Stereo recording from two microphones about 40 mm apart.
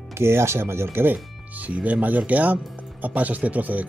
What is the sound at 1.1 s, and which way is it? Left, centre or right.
Speech, right.